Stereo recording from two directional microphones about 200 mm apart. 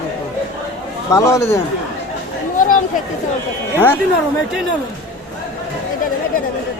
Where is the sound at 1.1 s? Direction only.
15° left (ahead or behind).